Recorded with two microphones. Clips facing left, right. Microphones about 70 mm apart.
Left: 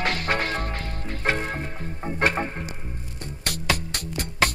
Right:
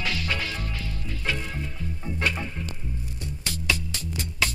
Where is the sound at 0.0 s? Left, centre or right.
Left.